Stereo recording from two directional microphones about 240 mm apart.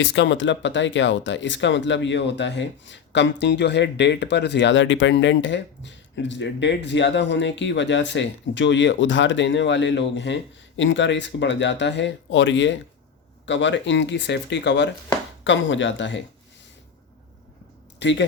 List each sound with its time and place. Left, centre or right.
0.0 s speech: left
18.0 s speech: left